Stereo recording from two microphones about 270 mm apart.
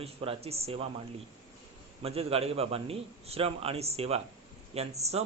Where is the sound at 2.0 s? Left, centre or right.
Right.